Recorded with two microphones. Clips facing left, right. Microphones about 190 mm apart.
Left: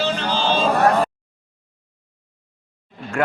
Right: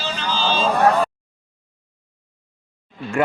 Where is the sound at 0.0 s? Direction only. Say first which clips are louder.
Left 3 dB; 60° left (ahead or behind).